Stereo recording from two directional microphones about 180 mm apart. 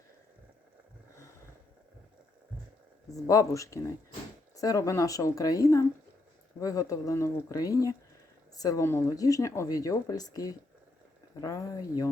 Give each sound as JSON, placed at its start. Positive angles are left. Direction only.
{"t": 3.1, "sound": "speech", "side_deg": 20}